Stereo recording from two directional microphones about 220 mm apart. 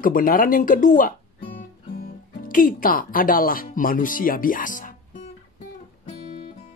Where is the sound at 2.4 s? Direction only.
40° left (ahead or behind).